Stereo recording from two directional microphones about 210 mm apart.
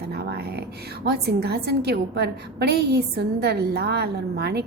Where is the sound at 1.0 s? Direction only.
50° right (ahead or behind).